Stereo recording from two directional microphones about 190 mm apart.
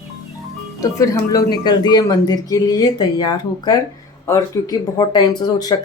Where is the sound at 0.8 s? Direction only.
15° left (ahead or behind).